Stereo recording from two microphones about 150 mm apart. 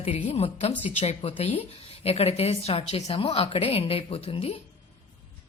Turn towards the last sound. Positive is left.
turn(degrees=40)  # may be behind; listen again after turning